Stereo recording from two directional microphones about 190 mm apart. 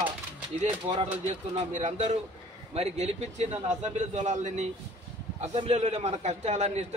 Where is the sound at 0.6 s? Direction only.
35° right (ahead or behind).